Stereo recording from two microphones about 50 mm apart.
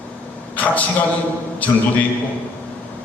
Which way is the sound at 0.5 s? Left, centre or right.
Left.